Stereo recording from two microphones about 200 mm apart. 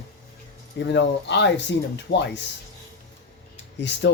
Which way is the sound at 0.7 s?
60° left (ahead or behind).